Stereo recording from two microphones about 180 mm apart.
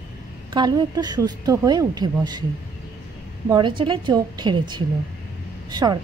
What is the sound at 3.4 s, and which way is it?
A woman's voice, 25° right (ahead or behind).